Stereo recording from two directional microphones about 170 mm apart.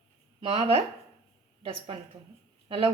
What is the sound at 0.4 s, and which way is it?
Speech, 35° right (ahead or behind).